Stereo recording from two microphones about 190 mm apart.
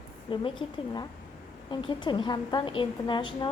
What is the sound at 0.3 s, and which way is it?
Speech, 30° left (ahead or behind).